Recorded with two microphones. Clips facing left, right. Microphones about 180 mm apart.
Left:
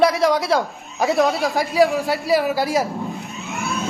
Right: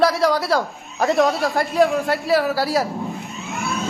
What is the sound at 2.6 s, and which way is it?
Vehicle, centre (ahead or behind).